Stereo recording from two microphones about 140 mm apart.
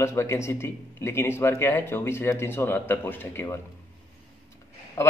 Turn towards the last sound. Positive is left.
turn(degrees=20)  # may be behind; listen again after turning